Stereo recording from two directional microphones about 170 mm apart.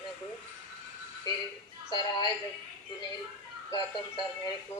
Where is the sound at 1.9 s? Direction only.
25° left (ahead or behind).